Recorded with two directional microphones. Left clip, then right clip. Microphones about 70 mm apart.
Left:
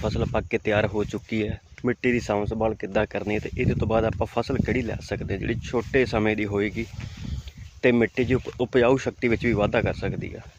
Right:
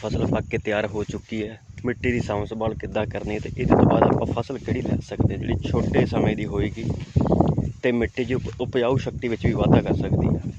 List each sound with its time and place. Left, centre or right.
0.0 s speech: left
0.9 s speech: left
1.8 s speech: left
2.6 s speech: left
3.8 s speech: left
6.1 s speech: left
7.4 s speech: left